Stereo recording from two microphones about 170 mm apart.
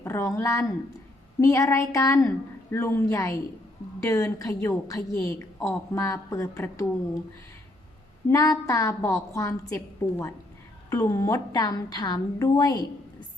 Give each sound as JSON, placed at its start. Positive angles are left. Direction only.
{"t": 0.0, "sound": "a woman's voice", "side_deg": 15}
{"t": 8.3, "sound": "a woman's voice", "side_deg": 20}